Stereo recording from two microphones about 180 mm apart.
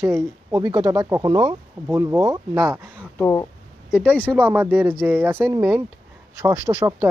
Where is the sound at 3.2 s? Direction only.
15° left (ahead or behind).